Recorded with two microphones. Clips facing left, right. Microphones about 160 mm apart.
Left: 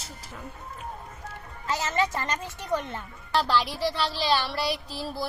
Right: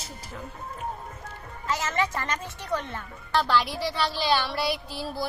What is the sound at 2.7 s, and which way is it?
Speech, 20° left (ahead or behind).